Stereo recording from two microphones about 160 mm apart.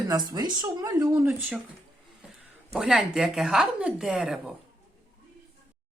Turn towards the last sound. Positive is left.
turn(degrees=-5)  # may be behind; listen again after turning